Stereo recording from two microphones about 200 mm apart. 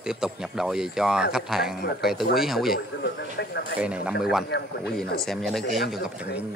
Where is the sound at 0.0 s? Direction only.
5° right (ahead or behind).